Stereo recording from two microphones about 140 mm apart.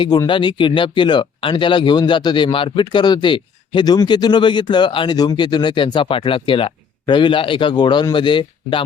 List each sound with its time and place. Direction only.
0.0 s speech: 35° left (ahead or behind)